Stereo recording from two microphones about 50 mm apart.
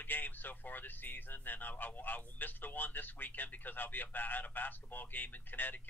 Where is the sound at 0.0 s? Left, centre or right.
Left.